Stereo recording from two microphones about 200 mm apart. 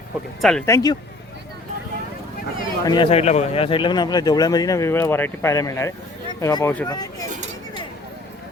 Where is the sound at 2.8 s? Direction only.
20° left (ahead or behind).